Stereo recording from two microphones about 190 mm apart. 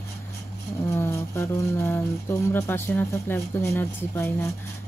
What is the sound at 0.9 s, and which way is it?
Speech, 15° left (ahead or behind).